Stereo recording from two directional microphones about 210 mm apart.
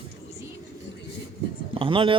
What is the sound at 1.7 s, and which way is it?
Speech, 25° right (ahead or behind).